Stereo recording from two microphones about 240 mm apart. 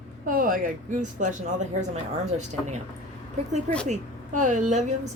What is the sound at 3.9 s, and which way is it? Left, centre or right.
Speech, right.